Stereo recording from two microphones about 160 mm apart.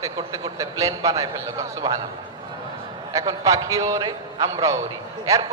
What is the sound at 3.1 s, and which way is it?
A man's voice, 20° right (ahead or behind).